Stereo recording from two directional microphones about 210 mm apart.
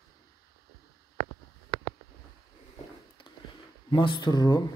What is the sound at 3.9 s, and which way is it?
Speech, 20° left (ahead or behind).